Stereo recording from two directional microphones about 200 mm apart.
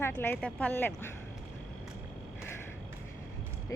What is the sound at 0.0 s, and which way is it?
Speech, 10° left (ahead or behind).